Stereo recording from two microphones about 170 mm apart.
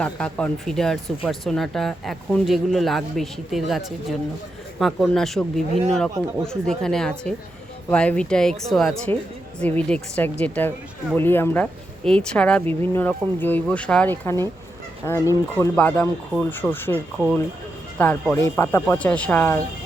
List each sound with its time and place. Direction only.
0.0 s speech: 5° left (ahead or behind)
16.9 s speech: 10° right (ahead or behind)
17.9 s speech: 10° left (ahead or behind)